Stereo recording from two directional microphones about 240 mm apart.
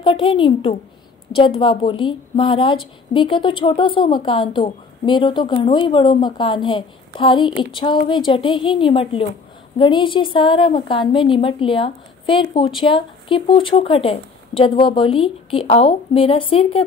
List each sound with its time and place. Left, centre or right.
0.0 s a woman's voice: centre